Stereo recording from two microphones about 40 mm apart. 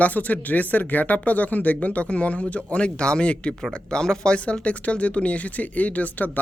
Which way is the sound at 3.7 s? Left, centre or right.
Centre.